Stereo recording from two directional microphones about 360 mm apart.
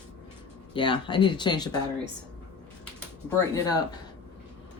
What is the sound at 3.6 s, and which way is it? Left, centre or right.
Speech, centre.